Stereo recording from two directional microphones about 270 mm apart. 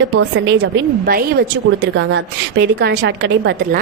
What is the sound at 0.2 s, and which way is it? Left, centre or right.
A woman's voice, right.